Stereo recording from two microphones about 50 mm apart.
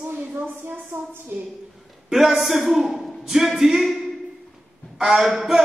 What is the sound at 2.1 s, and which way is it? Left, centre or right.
A man's voice, centre.